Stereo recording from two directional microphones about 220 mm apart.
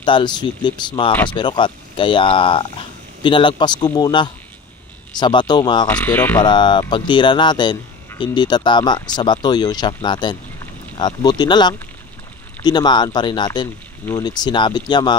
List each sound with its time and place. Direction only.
0.0 s speech: 20° left (ahead or behind)
5.9 s speech: 10° left (ahead or behind)
6.4 s speech: 20° left (ahead or behind)